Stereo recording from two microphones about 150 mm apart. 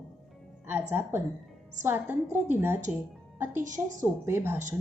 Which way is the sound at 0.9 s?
15° right (ahead or behind).